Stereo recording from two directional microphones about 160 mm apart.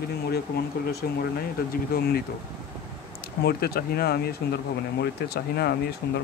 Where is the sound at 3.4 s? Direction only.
75° left (ahead or behind).